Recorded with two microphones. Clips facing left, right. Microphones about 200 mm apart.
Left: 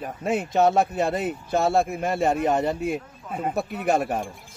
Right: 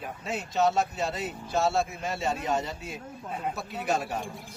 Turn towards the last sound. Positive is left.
turn(degrees=55)  # may be behind; listen again after turning